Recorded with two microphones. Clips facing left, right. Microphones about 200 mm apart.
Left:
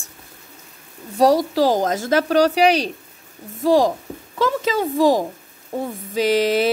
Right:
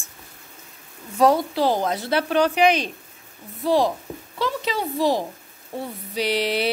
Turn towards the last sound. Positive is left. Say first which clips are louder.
# left 6 dB
turn(degrees=45)  # may be behind; listen again after turning